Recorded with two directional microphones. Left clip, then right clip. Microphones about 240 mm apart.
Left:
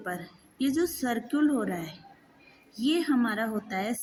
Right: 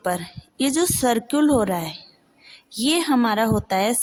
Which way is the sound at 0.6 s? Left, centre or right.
Right.